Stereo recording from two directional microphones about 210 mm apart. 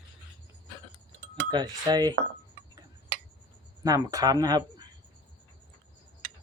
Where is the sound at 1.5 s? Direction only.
20° right (ahead or behind).